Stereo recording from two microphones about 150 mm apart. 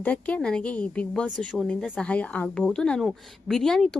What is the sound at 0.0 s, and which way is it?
A woman's voice, 10° left (ahead or behind).